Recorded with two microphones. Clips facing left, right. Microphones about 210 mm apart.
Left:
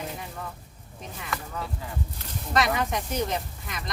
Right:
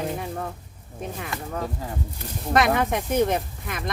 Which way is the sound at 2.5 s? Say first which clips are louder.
Right 4 dB; 55° right (ahead or behind).